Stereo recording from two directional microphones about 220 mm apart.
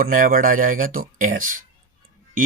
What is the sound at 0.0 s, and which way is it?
Speech, 40° right (ahead or behind).